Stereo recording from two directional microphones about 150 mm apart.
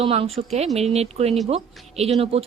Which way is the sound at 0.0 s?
40° right (ahead or behind).